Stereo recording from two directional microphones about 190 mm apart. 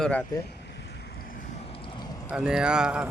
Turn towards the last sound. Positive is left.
turn(degrees=-5)  # may be behind; listen again after turning